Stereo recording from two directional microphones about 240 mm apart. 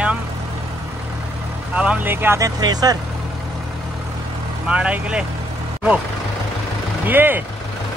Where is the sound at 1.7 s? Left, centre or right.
Centre.